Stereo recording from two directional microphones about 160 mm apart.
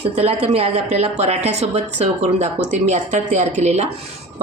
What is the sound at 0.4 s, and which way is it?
Speech, 40° right (ahead or behind).